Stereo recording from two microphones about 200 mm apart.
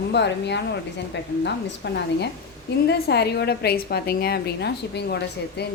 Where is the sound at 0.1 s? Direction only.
60° left (ahead or behind).